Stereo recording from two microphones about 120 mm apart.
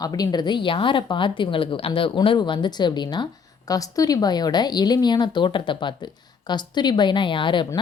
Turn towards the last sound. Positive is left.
turn(degrees=45)  # may be behind; listen again after turning